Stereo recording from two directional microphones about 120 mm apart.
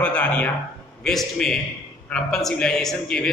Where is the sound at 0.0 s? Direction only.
10° left (ahead or behind).